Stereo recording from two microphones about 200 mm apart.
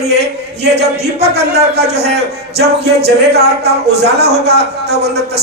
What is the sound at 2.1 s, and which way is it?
Speech, 55° right (ahead or behind).